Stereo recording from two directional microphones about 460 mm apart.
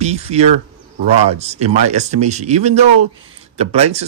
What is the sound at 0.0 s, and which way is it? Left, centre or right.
A man's voice, centre.